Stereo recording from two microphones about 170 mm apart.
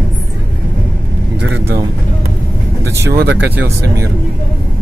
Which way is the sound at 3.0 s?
75° right (ahead or behind).